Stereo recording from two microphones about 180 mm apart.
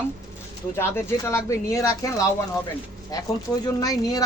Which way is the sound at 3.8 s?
20° left (ahead or behind).